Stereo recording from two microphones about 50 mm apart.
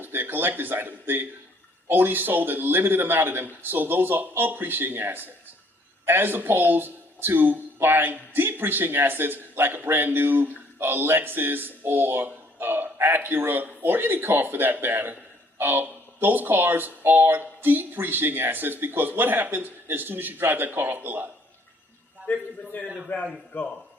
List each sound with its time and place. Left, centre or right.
0.0 s speech: right
22.3 s a man's voice: left